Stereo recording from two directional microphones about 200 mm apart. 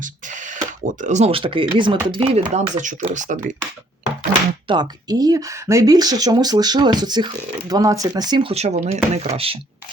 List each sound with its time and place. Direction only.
0.0 s speech: 40° right (ahead or behind); by 2.5 s 25° right (ahead or behind)
2.6 s speech: 35° right (ahead or behind)
4.7 s speech: 20° right (ahead or behind)